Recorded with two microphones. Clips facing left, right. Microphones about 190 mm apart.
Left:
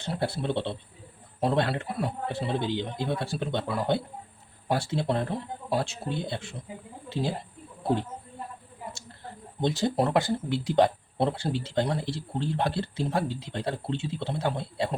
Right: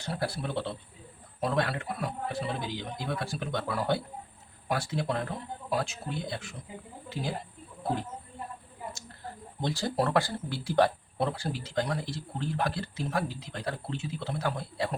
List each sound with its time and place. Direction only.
0.0 s speech: 25° left (ahead or behind)
9.6 s speech: 20° left (ahead or behind)